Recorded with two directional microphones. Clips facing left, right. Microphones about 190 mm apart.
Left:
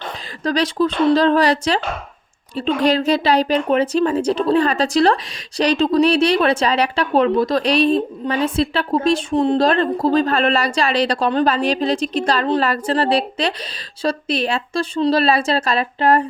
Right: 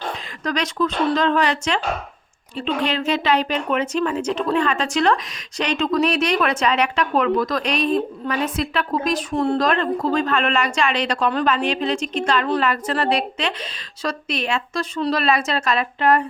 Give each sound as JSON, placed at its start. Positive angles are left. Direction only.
{"t": 0.4, "sound": "a woman's voice", "side_deg": 30}
{"t": 9.6, "sound": "a woman's voice", "side_deg": 35}